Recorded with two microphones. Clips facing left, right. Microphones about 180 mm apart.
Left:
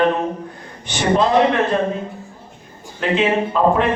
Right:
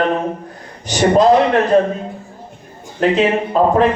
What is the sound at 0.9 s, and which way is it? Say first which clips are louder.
Speech: right 5 dB; 40° right (ahead or behind).